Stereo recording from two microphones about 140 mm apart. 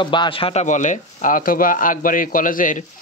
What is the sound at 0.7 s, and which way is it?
Speech, 60° left (ahead or behind).